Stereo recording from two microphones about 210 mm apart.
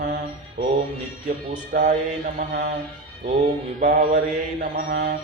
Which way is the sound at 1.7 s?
40° right (ahead or behind).